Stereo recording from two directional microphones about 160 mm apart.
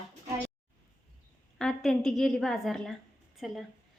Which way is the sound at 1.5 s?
5° left (ahead or behind).